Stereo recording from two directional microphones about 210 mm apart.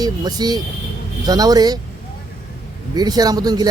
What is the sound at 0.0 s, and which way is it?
Speech, 20° right (ahead or behind).